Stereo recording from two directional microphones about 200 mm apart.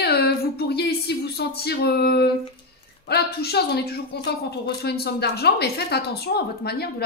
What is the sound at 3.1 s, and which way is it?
A woman's voice, 50° left (ahead or behind).